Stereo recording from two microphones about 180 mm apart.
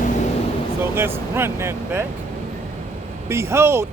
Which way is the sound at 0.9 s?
15° right (ahead or behind).